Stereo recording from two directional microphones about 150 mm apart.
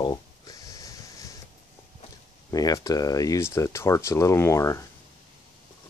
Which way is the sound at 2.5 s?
25° left (ahead or behind).